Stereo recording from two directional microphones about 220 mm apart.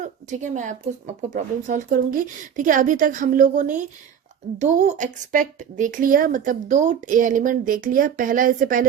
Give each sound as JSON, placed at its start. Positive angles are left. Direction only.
{"t": 0.0, "sound": "a woman's voice", "side_deg": -35}